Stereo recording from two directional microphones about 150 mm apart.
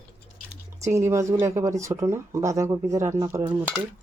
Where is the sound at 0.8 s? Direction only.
20° right (ahead or behind).